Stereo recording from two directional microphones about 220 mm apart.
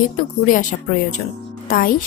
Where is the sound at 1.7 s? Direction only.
40° left (ahead or behind).